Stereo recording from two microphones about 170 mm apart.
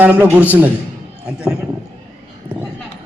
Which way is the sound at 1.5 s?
5° right (ahead or behind).